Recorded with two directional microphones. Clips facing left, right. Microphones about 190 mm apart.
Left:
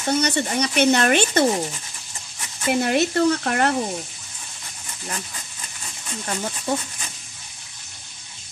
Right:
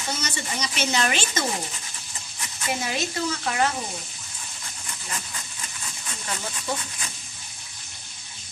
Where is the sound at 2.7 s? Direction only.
60° left (ahead or behind).